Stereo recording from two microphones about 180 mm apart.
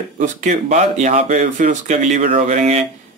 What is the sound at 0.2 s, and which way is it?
Speech, 40° right (ahead or behind).